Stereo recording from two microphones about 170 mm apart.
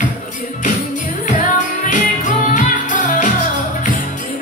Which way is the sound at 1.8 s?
50° left (ahead or behind).